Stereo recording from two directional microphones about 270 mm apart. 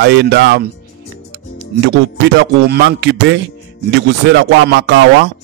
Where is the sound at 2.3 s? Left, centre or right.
Right.